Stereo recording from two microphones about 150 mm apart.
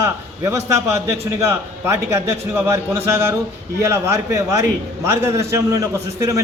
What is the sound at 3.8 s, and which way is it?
A man's voice, 15° right (ahead or behind).